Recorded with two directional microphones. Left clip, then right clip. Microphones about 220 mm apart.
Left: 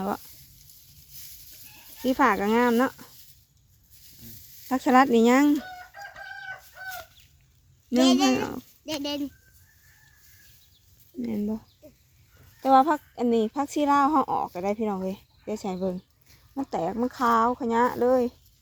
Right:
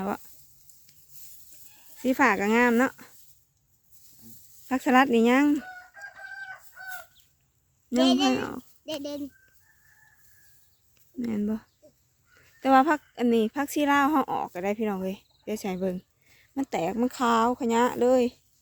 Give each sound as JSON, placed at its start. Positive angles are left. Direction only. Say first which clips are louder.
{"t": 2.0, "sound": "speech", "louder": "left 1 dB", "side_deg": -10}
{"t": 4.7, "sound": "speech", "louder": "left 2 dB", "side_deg": -5}
{"t": 6.8, "sound": "chicken", "louder": "left 2 dB", "side_deg": 40}
{"t": 8.2, "sound": "speech", "louder": "left 2 dB", "side_deg": 0}
{"t": 8.8, "sound": "speech", "louder": "left 3 dB", "side_deg": 35}
{"t": 11.2, "sound": "speech", "louder": "even", "side_deg": -15}
{"t": 12.6, "sound": "speech", "louder": "left 1 dB", "side_deg": -20}